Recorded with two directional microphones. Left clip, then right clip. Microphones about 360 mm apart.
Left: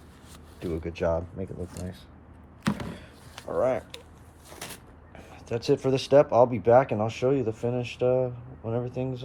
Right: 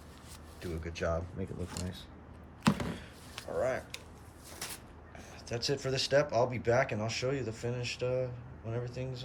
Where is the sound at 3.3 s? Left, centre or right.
Centre.